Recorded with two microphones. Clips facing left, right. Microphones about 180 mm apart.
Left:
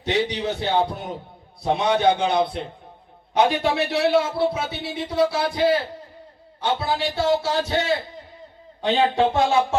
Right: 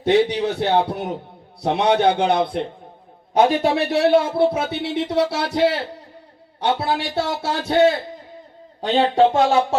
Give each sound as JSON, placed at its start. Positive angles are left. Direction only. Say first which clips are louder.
{"t": 0.0, "sound": "a man's voice", "louder": "right 6 dB", "side_deg": -55}
{"t": 3.3, "sound": "a man's voice", "louder": "right 3 dB", "side_deg": -40}
{"t": 8.8, "sound": "speech", "louder": "right 3 dB", "side_deg": -40}